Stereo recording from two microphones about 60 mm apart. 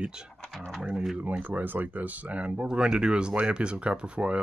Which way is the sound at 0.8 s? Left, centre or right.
Centre.